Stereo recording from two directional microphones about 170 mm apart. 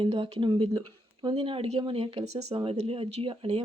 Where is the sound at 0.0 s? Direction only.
30° right (ahead or behind).